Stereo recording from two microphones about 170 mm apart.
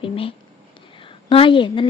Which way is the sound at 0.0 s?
30° left (ahead or behind).